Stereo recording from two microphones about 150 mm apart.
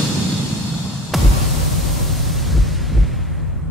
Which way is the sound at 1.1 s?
Centre (ahead or behind).